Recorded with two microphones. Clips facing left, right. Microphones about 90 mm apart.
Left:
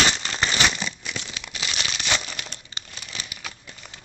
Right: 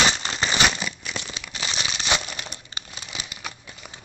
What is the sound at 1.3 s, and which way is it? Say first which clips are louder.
Crumpling: right 1 dB; 25° right (ahead or behind).